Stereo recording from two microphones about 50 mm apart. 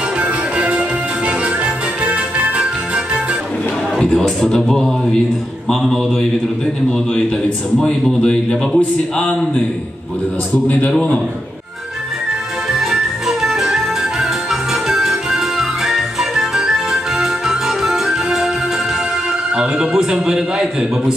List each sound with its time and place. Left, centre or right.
0.2 s music: right
4.0 s speech: centre
5.7 s mantra: centre
8.0 s speech: centre
10.7 s a man's voice: left
12.7 s music: centre
19.5 s a man's voice: centre